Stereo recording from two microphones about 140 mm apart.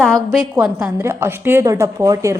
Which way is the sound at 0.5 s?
10° right (ahead or behind).